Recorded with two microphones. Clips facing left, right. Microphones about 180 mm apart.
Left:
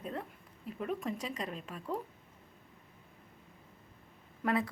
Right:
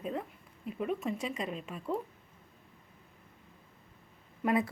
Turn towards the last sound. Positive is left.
turn(degrees=-15)  # may be behind; listen again after turning